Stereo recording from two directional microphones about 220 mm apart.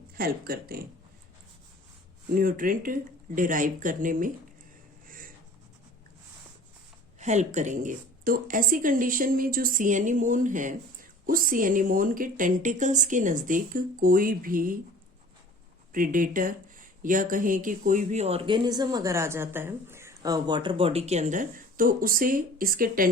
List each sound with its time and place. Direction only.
0.2 s speech: 45° right (ahead or behind)
2.3 s speech: 40° right (ahead or behind)
5.0 s a sound: 40° right (ahead or behind)
7.2 s speech: 30° right (ahead or behind)
15.9 s speech: 40° right (ahead or behind)